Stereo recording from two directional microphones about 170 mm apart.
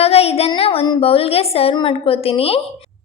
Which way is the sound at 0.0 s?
35° left (ahead or behind).